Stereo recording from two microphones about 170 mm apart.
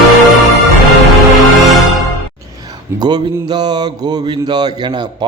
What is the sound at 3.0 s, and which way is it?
A man's voice, 25° right (ahead or behind).